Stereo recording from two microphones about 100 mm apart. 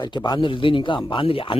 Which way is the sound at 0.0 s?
45° left (ahead or behind).